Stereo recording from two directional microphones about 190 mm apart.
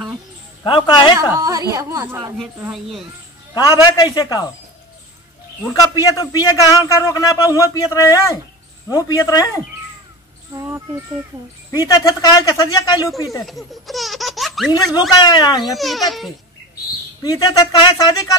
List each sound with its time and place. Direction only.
0.7 s speech: 25° left (ahead or behind)
1.3 s a woman's voice: 20° right (ahead or behind)
3.5 s speech: 20° left (ahead or behind)
5.6 s a man's voice: 15° left (ahead or behind)
10.5 s music: 10° right (ahead or behind)
11.7 s speech: 20° left (ahead or behind)
13.5 s laughter: centre (ahead or behind)
14.9 s speech: 20° left (ahead or behind)
15.6 s a child's voice: centre (ahead or behind)
17.2 s speech: 20° left (ahead or behind)